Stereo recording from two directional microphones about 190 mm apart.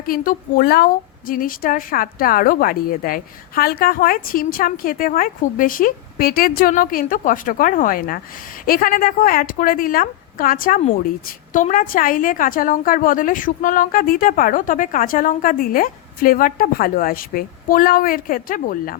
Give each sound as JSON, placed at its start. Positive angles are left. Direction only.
{"t": 0.0, "sound": "a woman's voice", "side_deg": 50}